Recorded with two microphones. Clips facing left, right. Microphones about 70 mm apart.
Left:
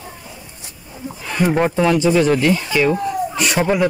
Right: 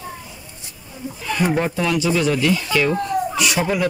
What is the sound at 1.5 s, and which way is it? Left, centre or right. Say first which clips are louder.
Speech: left 8 dB; left.